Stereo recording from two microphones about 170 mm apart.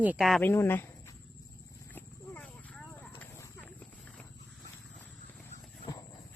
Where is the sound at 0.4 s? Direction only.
15° left (ahead or behind).